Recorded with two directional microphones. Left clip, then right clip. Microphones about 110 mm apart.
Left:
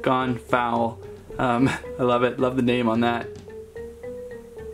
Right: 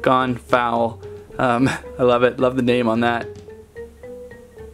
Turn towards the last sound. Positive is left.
turn(degrees=-30)  # may be behind; listen again after turning